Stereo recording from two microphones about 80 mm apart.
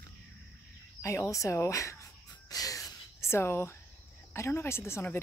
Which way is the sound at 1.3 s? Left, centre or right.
Left.